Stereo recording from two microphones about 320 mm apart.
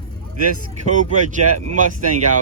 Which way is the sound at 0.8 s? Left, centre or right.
Right.